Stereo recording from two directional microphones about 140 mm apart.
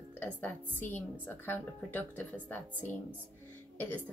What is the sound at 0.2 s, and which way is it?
A woman's voice, 15° left (ahead or behind).